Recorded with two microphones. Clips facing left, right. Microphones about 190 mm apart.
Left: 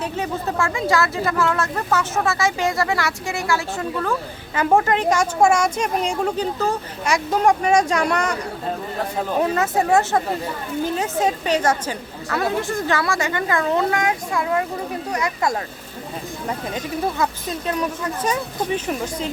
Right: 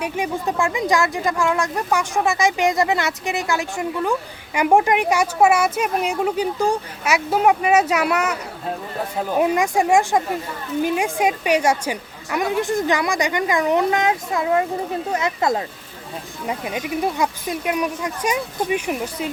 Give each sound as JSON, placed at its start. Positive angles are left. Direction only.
{"t": 0.0, "sound": "speech", "side_deg": -15}